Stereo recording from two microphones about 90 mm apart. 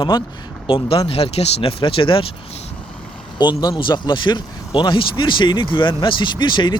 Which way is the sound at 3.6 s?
55° left (ahead or behind).